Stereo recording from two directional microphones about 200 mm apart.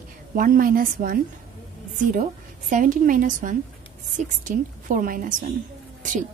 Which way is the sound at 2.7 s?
40° right (ahead or behind).